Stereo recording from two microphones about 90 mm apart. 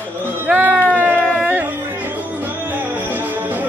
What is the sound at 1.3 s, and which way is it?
Music, 15° right (ahead or behind).